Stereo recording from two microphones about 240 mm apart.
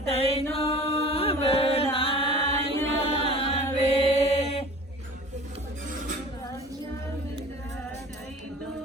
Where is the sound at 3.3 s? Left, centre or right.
Left.